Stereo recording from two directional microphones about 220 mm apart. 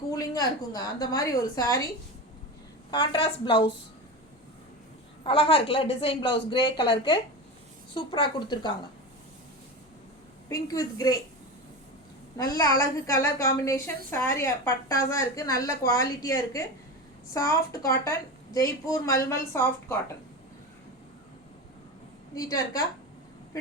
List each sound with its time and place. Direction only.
0.2 s a woman's voice: 15° left (ahead or behind)
2.9 s a woman's voice: 20° left (ahead or behind)
5.2 s a woman's voice: 25° left (ahead or behind)
10.5 s a woman's voice: 15° left (ahead or behind)
12.4 s a woman's voice: 15° left (ahead or behind)
22.4 s a woman's voice: 15° left (ahead or behind)